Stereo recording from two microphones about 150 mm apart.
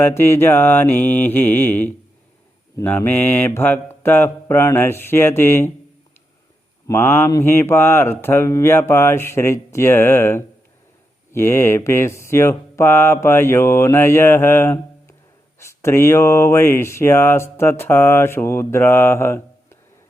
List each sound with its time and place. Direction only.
0.0 s speech: 15° left (ahead or behind)
6.8 s speech: 15° left (ahead or behind)